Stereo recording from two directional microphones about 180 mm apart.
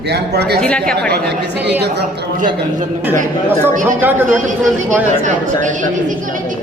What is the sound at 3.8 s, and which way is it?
Speech, 10° right (ahead or behind).